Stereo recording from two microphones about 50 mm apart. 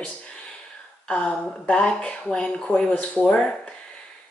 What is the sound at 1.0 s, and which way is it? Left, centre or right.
Speech, centre.